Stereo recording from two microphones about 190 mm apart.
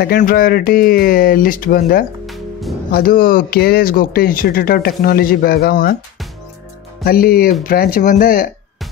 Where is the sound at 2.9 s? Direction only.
50° left (ahead or behind).